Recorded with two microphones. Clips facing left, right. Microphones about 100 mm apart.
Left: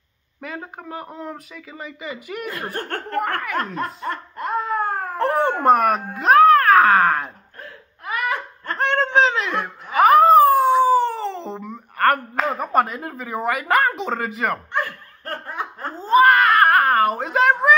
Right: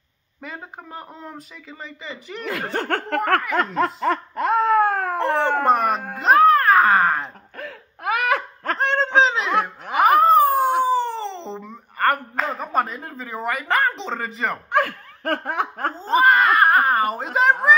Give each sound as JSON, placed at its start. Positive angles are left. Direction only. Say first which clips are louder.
{"t": 0.4, "sound": "speech", "louder": "left 3 dB", "side_deg": 0}
{"t": 2.4, "sound": "speech", "louder": "right 6 dB", "side_deg": -90}
{"t": 3.5, "sound": "laughter", "louder": "right 4 dB", "side_deg": -90}
{"t": 5.7, "sound": "speech", "louder": "left 3 dB", "side_deg": 0}
{"t": 7.5, "sound": "laughter", "louder": "right 5 dB", "side_deg": -85}
{"t": 8.7, "sound": "snicker", "louder": "left 1 dB", "side_deg": 0}
{"t": 9.9, "sound": "cat", "louder": "left 3 dB", "side_deg": 0}
{"t": 10.8, "sound": "a sound", "louder": "left 4 dB", "side_deg": 5}
{"t": 14.7, "sound": "laughter", "louder": "right 5 dB", "side_deg": -90}
{"t": 16.0, "sound": "baby cry", "louder": "left 3 dB", "side_deg": 0}